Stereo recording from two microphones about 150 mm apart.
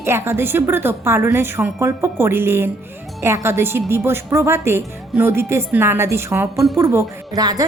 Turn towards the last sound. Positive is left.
turn(degrees=-25)  # may be behind; listen again after turning